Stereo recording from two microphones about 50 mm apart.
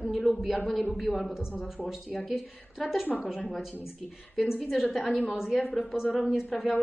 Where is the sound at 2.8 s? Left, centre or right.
Centre.